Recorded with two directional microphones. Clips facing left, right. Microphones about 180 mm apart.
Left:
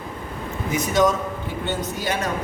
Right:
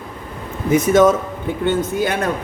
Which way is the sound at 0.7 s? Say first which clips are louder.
Right 7 dB; 50° right (ahead or behind).